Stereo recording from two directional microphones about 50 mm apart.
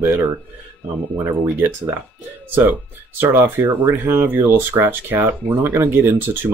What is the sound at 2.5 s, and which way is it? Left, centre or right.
Speech, right.